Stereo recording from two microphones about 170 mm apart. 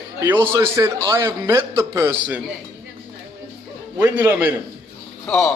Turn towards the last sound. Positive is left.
turn(degrees=15)  # may be behind; listen again after turning